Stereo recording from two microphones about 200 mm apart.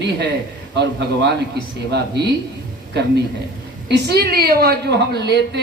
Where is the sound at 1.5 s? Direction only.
55° right (ahead or behind).